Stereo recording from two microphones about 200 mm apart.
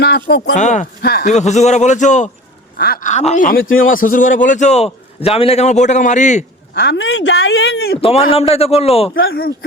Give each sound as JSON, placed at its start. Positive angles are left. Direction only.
{"t": 0.5, "sound": "a man's voice", "side_deg": 35}
{"t": 1.0, "sound": "speech", "side_deg": 50}
{"t": 1.3, "sound": "a man's voice", "side_deg": 35}
{"t": 2.7, "sound": "a man's voice", "side_deg": 50}
{"t": 6.7, "sound": "speech", "side_deg": 60}
{"t": 8.0, "sound": "a man's voice", "side_deg": 30}
{"t": 9.1, "sound": "speech", "side_deg": 50}